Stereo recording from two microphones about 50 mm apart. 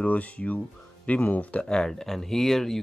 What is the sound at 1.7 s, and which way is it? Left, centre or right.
Speech, centre.